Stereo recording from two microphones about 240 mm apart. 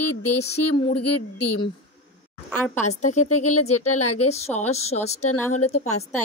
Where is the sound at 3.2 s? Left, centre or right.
Left.